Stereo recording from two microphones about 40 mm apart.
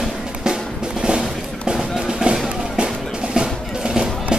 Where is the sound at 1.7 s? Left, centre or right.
Centre.